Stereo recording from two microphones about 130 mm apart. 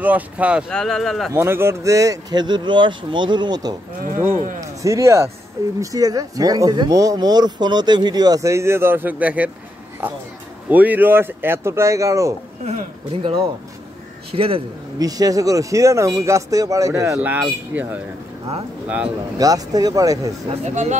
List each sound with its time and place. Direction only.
0.0 s speech: 10° right (ahead or behind)
0.7 s speech: 5° left (ahead or behind)
1.3 s speech: 20° right (ahead or behind)
10.7 s speech: 10° right (ahead or behind)
12.6 s a man's voice: 45° right (ahead or behind)
15.0 s speech: 30° right (ahead or behind)
19.3 s speech: 30° right (ahead or behind)
20.4 s speech: 60° right (ahead or behind)